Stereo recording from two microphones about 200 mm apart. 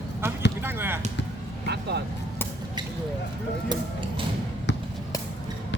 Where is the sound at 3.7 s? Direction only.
25° right (ahead or behind).